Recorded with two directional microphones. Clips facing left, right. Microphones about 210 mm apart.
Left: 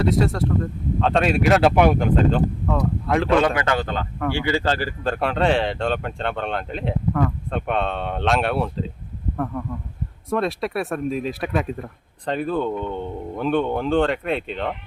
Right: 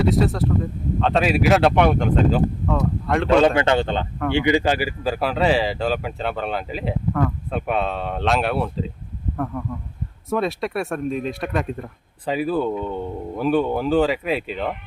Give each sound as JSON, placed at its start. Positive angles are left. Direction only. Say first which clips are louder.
{"t": 0.0, "sound": "speech", "louder": "right 1 dB", "side_deg": 0}
{"t": 3.4, "sound": "speech", "louder": "right 4 dB", "side_deg": -25}